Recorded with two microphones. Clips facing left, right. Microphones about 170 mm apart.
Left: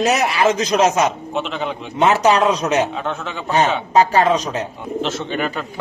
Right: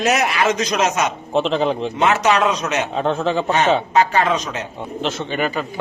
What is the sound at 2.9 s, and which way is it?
Speech, 30° right (ahead or behind).